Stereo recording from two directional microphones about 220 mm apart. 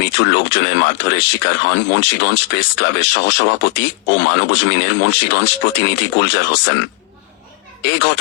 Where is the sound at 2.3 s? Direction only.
90° left.